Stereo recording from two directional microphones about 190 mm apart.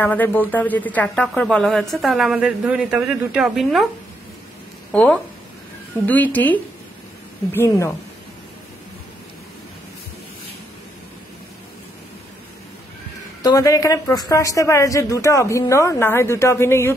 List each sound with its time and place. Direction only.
0.0 s speech: 10° left (ahead or behind)
4.9 s a woman's voice: 5° left (ahead or behind)
13.4 s a woman's voice: 15° left (ahead or behind)